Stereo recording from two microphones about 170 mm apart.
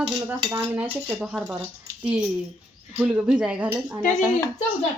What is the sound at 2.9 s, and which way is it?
Speech, 5° right (ahead or behind).